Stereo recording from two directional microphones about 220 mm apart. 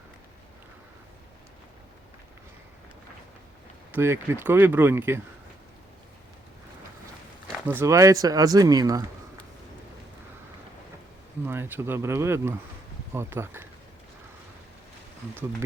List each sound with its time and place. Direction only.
3.9 s speech: 10° right (ahead or behind)
7.7 s speech: 10° right (ahead or behind)
11.4 s speech: 10° right (ahead or behind)